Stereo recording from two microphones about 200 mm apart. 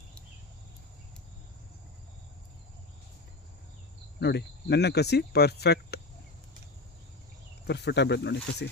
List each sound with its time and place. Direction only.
4.2 s speech: 55° left (ahead or behind)
7.7 s speech: 55° left (ahead or behind)